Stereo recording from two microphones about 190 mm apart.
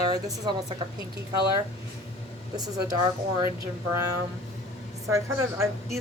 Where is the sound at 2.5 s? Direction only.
20° right (ahead or behind).